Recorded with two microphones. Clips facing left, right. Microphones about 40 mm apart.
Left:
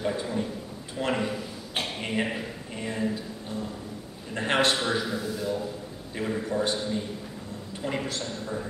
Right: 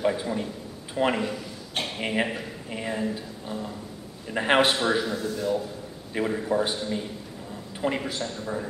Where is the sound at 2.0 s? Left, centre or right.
Centre.